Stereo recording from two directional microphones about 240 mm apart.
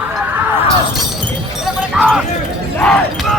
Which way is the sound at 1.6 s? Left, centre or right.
Centre.